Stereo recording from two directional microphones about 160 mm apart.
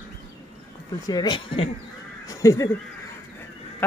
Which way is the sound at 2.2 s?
20° left (ahead or behind).